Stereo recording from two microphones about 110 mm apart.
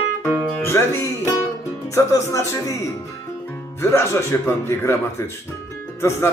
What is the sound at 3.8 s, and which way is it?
Speech, 25° left (ahead or behind).